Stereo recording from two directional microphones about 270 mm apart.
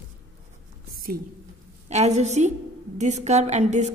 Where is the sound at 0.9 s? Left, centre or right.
Right.